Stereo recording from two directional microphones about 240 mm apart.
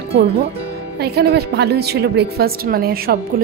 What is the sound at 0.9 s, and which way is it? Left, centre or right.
A woman's voice, right.